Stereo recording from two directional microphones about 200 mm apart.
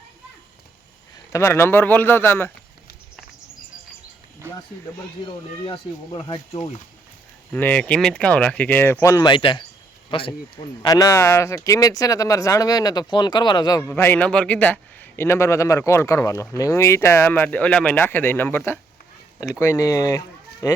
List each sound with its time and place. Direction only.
1.3 s speech: 15° left (ahead or behind)
4.4 s a sound: 10° right (ahead or behind)
5.2 s speech: 25° left (ahead or behind)
7.5 s speech: 5° left (ahead or behind)